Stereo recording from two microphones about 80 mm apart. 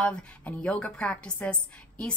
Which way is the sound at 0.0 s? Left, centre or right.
Centre.